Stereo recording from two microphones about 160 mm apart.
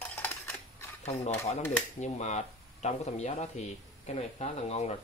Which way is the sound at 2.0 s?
45° left (ahead or behind).